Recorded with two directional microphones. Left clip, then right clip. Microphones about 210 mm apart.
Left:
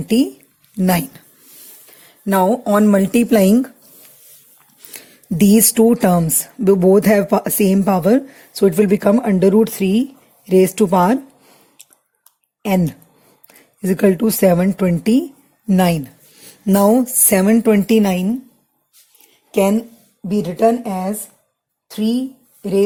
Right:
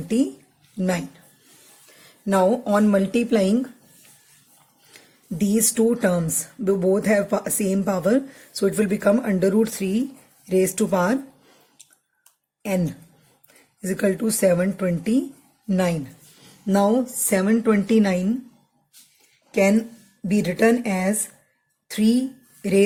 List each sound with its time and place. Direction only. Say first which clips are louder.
0.8 s speech: left 7 dB; 40° left (ahead or behind)
2.0 s speech: left 4 dB; 30° left (ahead or behind)
4.9 s speech: left 10 dB; 40° left (ahead or behind)
12.6 s speech: left 6 dB; 40° left (ahead or behind)
19.5 s speech: left 4 dB; 30° left (ahead or behind)
20.2 s a woman's voice: left 4 dB; 10° left (ahead or behind)